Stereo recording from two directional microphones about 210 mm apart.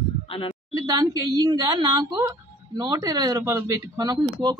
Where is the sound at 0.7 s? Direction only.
15° right (ahead or behind).